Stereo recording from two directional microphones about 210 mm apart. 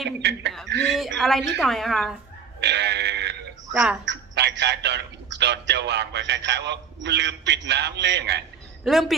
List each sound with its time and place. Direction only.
0.2 s a man's voice: 50° right (ahead or behind)
0.9 s a woman's voice: centre (ahead or behind)
2.6 s synthetic singing: 55° right (ahead or behind)
3.7 s speech: 5° right (ahead or behind)
4.0 s a man's voice: 55° right (ahead or behind)
8.8 s a woman's voice: centre (ahead or behind)